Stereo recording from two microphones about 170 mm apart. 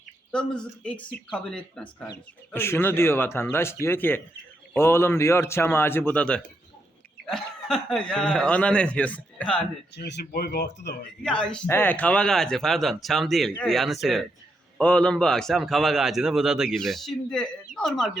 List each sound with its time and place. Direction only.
0.3 s a man's voice: 5° left (ahead or behind)
9.9 s speech: 80° left
11.2 s speech: 5° left (ahead or behind)